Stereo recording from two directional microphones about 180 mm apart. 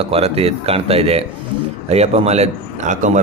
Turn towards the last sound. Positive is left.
turn(degrees=-40)  # may be behind; listen again after turning